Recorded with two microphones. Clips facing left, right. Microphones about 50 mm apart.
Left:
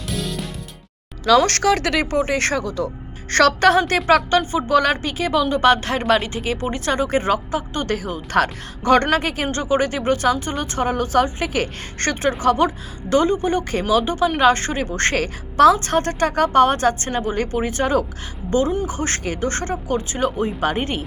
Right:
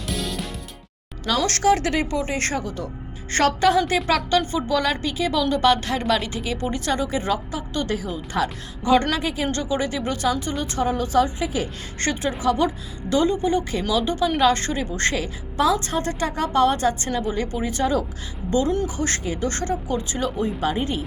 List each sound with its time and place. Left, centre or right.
0.1 s music: centre
1.5 s speech: left
2.0 s speech: left
3.3 s a woman's voice: left
3.8 s speech: left
4.1 s speech: left
7.9 s speech: left
9.0 s speech: left
9.5 s speech: left
12.4 s speech: left
13.9 s speech: left
15.8 s speech: left